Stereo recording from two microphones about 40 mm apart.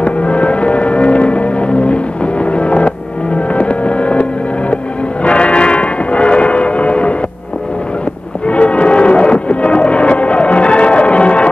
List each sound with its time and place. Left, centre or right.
0.0 s music: left
8.5 s music: left